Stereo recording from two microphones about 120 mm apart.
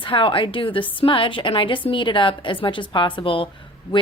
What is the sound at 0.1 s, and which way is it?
A woman's voice, 45° left (ahead or behind).